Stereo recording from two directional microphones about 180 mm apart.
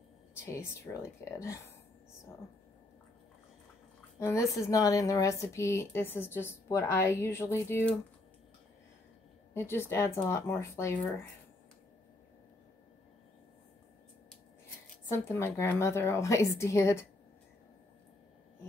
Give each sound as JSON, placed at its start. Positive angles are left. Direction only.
{"t": 0.4, "sound": "a woman's voice", "side_deg": 15}
{"t": 4.2, "sound": "a woman's voice", "side_deg": 15}
{"t": 9.5, "sound": "a woman's voice", "side_deg": 15}
{"t": 15.0, "sound": "a woman's voice", "side_deg": 15}